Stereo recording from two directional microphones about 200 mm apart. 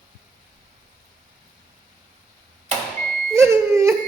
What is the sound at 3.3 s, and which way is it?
Crying, 15° right (ahead or behind).